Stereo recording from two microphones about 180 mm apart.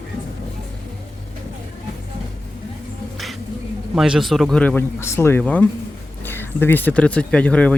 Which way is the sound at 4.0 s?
Centre (ahead or behind).